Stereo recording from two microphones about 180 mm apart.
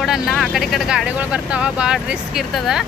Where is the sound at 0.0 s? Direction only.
Centre (ahead or behind).